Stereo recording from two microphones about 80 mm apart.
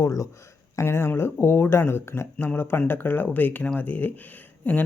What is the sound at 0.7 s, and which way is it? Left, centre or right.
Speech, left.